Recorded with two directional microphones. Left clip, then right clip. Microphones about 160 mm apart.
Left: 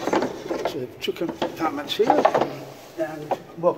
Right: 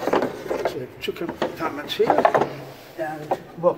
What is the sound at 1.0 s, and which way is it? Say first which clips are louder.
A man's voice: even; 70° left (ahead or behind).